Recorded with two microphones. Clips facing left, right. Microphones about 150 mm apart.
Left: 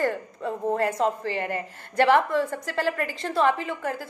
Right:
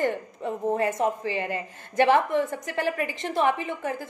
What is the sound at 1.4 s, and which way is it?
Speech, 60° left (ahead or behind).